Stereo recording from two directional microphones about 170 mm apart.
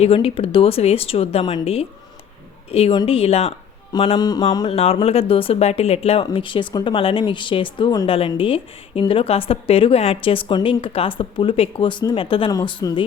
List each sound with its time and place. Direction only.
0.0 s speech: 35° left (ahead or behind)
3.9 s mantra: 25° left (ahead or behind)
4.7 s speech: 35° left (ahead or behind)